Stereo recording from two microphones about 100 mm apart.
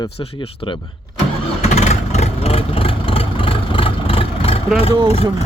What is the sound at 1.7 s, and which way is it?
Vehicle, 90° left.